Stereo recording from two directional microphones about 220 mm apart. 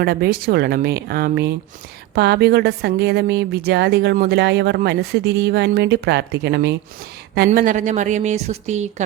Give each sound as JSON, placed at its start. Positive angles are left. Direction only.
{"t": 0.0, "sound": "a woman's voice", "side_deg": -45}